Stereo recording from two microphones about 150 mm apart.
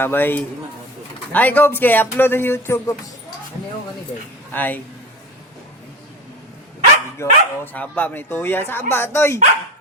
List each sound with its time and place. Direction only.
0.0 s speech: 15° left (ahead or behind)
4.5 s speech: 10° left (ahead or behind)
7.2 s speech: 10° left (ahead or behind)